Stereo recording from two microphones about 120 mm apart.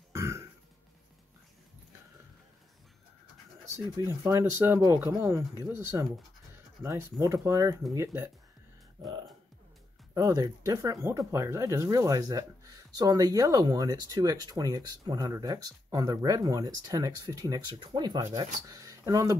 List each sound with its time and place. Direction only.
0.1 s burping: 25° right (ahead or behind)
4.2 s speech: 25° right (ahead or behind)
10.1 s speech: 30° right (ahead or behind)